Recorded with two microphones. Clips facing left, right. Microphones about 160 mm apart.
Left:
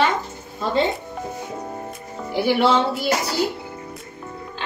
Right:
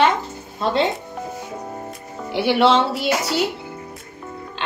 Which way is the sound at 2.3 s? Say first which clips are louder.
Right 2 dB; 80° right.